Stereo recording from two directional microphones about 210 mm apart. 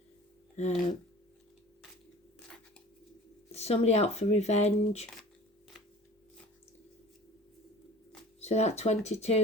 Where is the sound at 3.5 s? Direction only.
30° left (ahead or behind).